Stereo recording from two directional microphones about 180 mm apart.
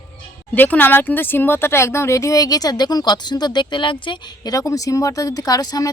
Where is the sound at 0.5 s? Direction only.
10° left (ahead or behind).